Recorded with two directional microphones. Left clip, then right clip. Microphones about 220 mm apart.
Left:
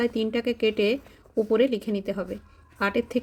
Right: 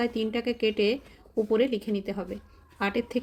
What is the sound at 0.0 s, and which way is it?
A woman's voice, 15° left (ahead or behind).